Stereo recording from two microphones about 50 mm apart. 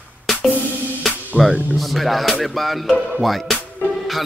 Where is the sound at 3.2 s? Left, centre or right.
Centre.